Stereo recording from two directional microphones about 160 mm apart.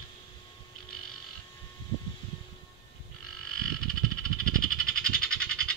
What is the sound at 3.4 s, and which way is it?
Frog, 5° left (ahead or behind).